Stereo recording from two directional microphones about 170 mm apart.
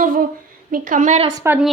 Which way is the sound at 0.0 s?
55° right (ahead or behind).